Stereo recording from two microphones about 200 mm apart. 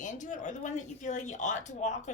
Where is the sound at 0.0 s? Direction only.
40° left (ahead or behind).